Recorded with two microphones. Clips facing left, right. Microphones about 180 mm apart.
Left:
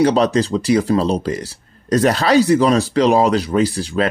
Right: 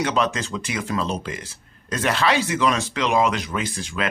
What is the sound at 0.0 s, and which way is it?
Speech, 35° left (ahead or behind).